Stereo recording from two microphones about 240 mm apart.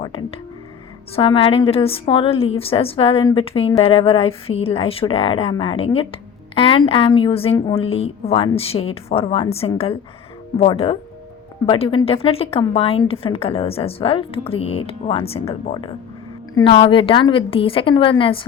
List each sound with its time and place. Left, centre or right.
0.1 s a woman's voice: left